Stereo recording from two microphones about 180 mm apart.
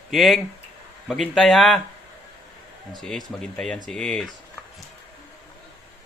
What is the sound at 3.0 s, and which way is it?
Speech, centre (ahead or behind).